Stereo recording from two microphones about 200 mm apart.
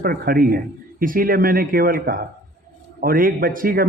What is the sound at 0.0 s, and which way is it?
A man's voice, 45° right (ahead or behind).